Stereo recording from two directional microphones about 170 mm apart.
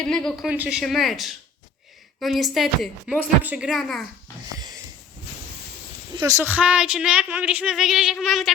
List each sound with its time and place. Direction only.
0.0 s a woman's voice: 5° left (ahead or behind)
4.5 s sniff: 20° right (ahead or behind)
6.1 s speech: 20° right (ahead or behind); by 8.5 s centre (ahead or behind)